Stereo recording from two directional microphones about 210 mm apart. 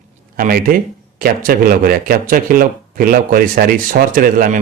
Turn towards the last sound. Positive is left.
turn(degrees=-40)  # may be behind; listen again after turning